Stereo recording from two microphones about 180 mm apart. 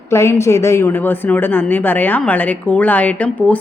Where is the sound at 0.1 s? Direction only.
15° left (ahead or behind).